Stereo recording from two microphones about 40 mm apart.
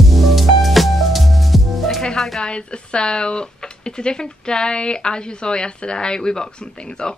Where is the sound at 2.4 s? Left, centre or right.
Left.